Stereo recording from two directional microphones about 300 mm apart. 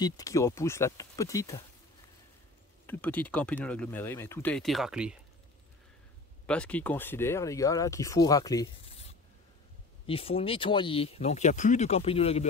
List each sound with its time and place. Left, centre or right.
0.0 s speech: centre
2.9 s speech: centre
6.4 s speech: centre